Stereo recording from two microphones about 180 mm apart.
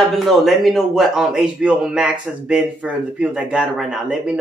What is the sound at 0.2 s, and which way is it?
A man's voice, centre (ahead or behind).